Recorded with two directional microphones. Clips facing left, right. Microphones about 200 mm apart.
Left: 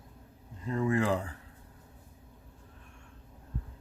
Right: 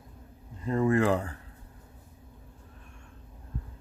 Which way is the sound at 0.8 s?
55° right (ahead or behind).